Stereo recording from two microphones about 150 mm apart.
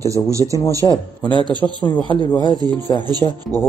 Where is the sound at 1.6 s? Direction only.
15° left (ahead or behind).